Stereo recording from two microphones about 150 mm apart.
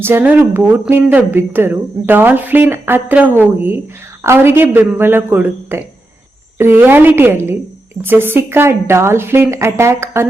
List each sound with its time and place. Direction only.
0.0 s speech: 15° right (ahead or behind)